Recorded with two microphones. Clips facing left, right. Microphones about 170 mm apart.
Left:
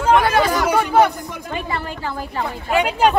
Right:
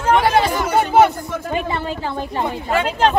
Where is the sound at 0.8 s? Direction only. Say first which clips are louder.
Right 3 dB; 25° right (ahead or behind).